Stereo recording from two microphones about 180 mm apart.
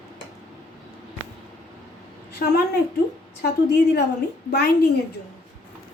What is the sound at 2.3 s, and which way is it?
A woman's voice, 65° left (ahead or behind).